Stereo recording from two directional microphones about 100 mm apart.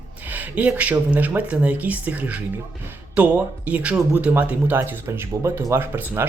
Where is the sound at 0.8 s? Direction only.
15° right (ahead or behind).